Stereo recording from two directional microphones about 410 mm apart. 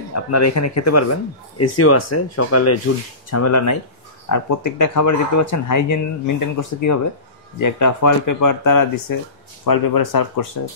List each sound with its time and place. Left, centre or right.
0.1 s speech: left